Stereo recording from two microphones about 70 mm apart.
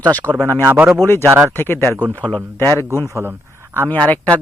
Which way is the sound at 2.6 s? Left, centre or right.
Left.